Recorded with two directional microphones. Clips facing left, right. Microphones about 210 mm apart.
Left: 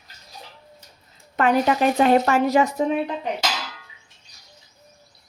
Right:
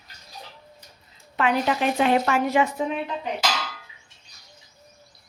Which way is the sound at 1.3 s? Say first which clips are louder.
Left 4 dB; 45° left (ahead or behind).